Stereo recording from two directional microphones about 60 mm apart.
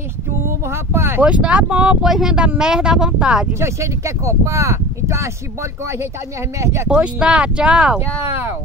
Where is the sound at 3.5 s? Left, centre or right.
Right.